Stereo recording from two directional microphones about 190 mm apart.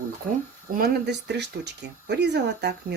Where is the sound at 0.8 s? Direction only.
60° right (ahead or behind).